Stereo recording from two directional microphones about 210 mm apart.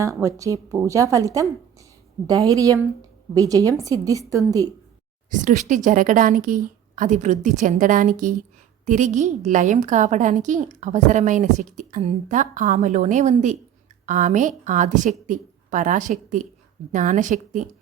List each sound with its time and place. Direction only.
0.0 s a woman's voice: 15° right (ahead or behind)
5.3 s a woman's voice: 35° right (ahead or behind)